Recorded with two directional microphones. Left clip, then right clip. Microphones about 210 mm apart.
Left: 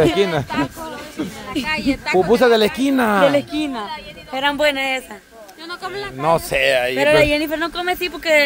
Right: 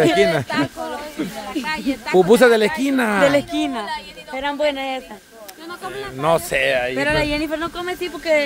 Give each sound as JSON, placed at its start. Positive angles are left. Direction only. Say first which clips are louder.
{"t": 0.0, "sound": "speech", "louder": "right 1 dB", "side_deg": 5}
{"t": 1.7, "sound": "speech", "louder": "left 5 dB", "side_deg": 20}
{"t": 2.1, "sound": "speech", "louder": "right 2 dB", "side_deg": -15}
{"t": 2.8, "sound": "speech", "louder": "left 2 dB", "side_deg": 10}
{"t": 4.3, "sound": "a man's voice", "louder": "left 3 dB", "side_deg": 50}
{"t": 5.7, "sound": "a sound", "louder": "left 2 dB", "side_deg": 35}
{"t": 6.2, "sound": "speech", "louder": "left 1 dB", "side_deg": 0}
{"t": 6.7, "sound": "speech", "louder": "left 3 dB", "side_deg": 40}
{"t": 7.0, "sound": "speech", "louder": "left 5 dB", "side_deg": 20}